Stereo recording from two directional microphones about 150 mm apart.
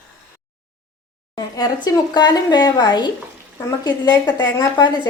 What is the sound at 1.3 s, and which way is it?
A woman's voice, 25° left (ahead or behind).